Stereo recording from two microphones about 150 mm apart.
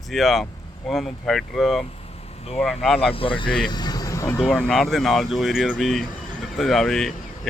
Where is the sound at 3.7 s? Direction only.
25° left (ahead or behind).